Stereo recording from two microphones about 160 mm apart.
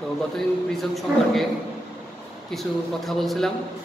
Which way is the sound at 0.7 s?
Centre (ahead or behind).